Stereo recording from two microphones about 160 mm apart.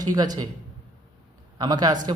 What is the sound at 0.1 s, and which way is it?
Speech, 25° right (ahead or behind).